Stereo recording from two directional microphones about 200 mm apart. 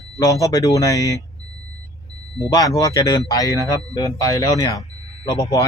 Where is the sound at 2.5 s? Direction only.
20° left (ahead or behind).